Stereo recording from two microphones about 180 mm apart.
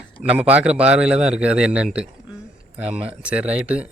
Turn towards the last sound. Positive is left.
turn(degrees=-5)  # may be behind; listen again after turning